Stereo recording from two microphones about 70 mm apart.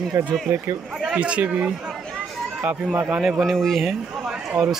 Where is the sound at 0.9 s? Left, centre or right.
Centre.